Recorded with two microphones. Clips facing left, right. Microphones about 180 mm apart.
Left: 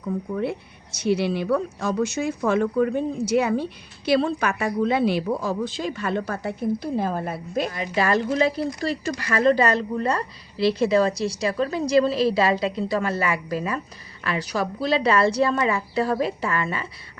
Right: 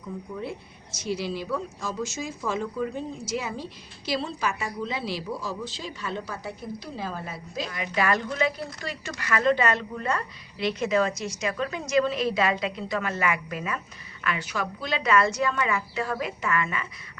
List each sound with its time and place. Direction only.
0.0 s speech: 65° left (ahead or behind)
7.7 s speech: 30° left (ahead or behind)